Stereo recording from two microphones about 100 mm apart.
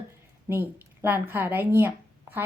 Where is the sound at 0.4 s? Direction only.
20° right (ahead or behind).